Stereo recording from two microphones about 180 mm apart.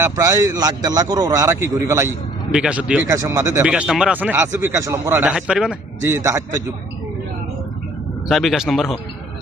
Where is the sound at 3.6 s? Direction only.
5° right (ahead or behind).